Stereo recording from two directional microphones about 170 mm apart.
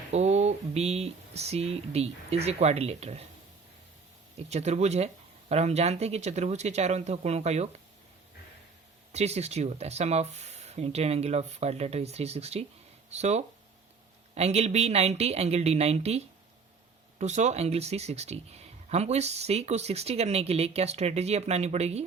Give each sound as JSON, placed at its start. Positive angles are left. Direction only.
{"t": 0.1, "sound": "speech", "side_deg": -40}
{"t": 4.4, "sound": "speech", "side_deg": -40}
{"t": 9.1, "sound": "speech", "side_deg": -40}